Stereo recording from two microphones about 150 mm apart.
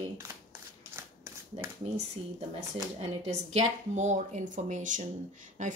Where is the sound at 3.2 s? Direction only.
50° right (ahead or behind).